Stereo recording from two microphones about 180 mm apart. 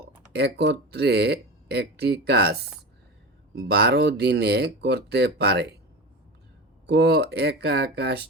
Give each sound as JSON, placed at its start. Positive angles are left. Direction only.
{"t": 0.3, "sound": "speech", "side_deg": -70}
{"t": 6.8, "sound": "speech", "side_deg": -65}